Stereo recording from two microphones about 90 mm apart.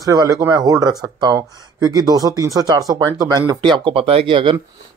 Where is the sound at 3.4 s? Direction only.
60° right (ahead or behind).